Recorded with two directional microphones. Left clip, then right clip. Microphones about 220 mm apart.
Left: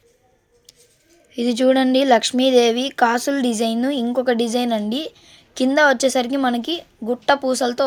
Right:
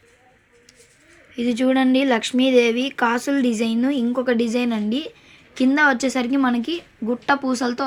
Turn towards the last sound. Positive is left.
turn(degrees=40)  # may be behind; listen again after turning